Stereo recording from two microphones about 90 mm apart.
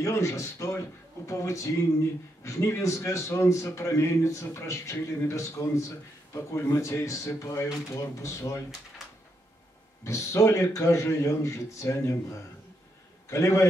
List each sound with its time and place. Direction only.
0.0 s a man's voice: 30° left (ahead or behind)
10.0 s a man's voice: 35° left (ahead or behind)